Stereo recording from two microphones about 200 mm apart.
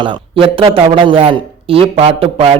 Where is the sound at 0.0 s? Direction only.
25° right (ahead or behind).